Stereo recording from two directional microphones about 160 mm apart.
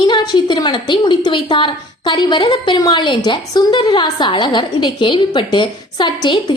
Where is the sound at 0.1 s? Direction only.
30° left (ahead or behind).